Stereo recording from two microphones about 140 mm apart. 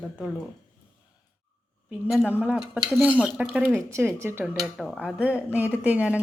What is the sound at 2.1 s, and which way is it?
Speech, 5° right (ahead or behind).